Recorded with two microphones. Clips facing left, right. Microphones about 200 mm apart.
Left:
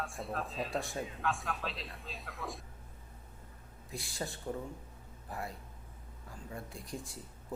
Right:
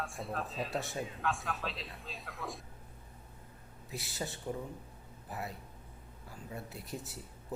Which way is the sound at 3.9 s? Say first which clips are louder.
Even; 5° right (ahead or behind).